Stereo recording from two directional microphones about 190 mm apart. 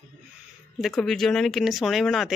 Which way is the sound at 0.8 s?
Centre (ahead or behind).